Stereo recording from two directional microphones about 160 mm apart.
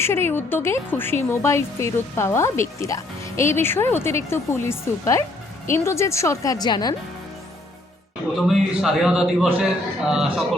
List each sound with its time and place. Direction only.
0.0 s a woman's voice: 15° left (ahead or behind)
8.4 s a man's voice: centre (ahead or behind)